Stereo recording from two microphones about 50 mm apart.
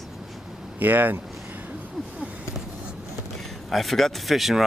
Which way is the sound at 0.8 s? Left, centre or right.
Right.